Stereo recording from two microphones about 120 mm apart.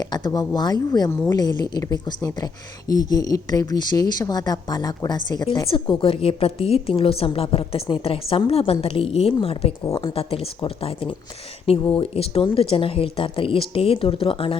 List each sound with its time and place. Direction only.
0.1 s a woman's voice: 35° left (ahead or behind)